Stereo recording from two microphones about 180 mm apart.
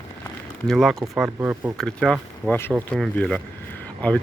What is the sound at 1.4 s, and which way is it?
Speech, 15° right (ahead or behind).